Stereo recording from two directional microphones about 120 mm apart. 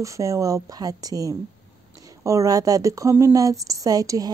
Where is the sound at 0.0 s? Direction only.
25° right (ahead or behind).